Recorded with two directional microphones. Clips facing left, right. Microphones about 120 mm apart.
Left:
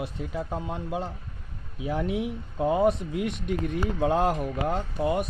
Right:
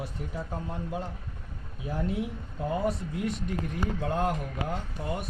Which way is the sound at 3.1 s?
70° left (ahead or behind).